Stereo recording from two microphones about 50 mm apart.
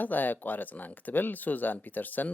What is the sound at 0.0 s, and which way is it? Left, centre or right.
Speech, left.